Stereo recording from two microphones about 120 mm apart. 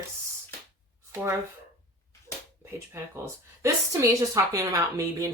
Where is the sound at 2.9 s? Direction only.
25° right (ahead or behind).